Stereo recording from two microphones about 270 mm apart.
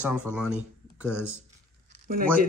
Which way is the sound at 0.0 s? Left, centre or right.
Centre.